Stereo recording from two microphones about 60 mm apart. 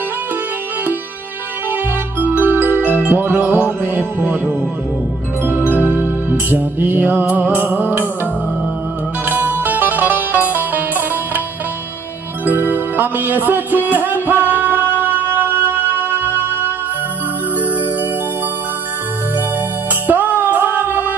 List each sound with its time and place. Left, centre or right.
1.7 s music: right
5.7 s music: right
7.6 s music: right
9.2 s music: right
12.4 s music: right
20.1 s music: right